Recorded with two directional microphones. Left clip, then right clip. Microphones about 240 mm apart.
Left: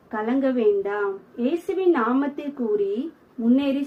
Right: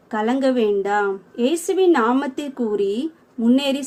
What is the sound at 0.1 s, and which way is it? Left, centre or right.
A woman's voice, right.